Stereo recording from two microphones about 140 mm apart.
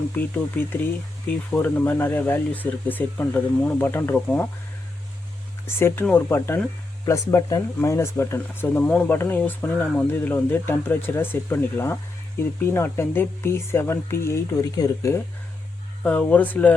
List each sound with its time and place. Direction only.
0.1 s speech: 15° left (ahead or behind)
5.6 s speech: 15° left (ahead or behind)
16.0 s speech: 10° left (ahead or behind)